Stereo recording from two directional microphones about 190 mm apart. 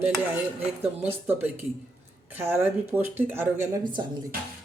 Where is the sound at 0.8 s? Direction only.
10° right (ahead or behind).